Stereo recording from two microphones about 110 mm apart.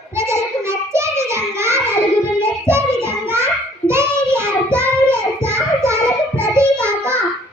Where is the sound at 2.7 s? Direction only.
25° right (ahead or behind).